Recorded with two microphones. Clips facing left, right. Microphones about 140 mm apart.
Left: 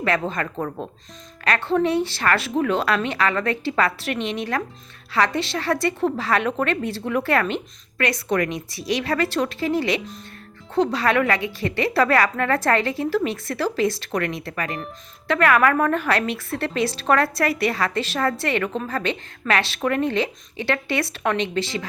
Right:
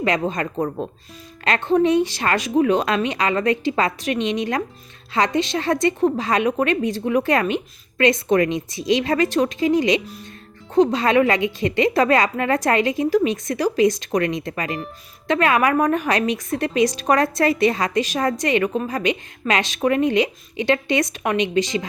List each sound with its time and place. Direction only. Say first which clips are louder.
0.0 s a woman's voice: right 2 dB; 20° right (ahead or behind)